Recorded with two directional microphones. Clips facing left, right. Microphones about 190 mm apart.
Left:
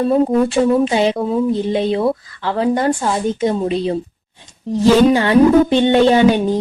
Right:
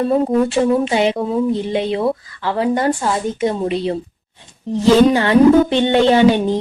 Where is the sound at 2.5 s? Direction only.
15° right (ahead or behind).